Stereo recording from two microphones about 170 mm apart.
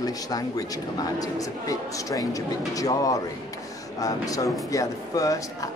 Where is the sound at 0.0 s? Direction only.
20° left (ahead or behind).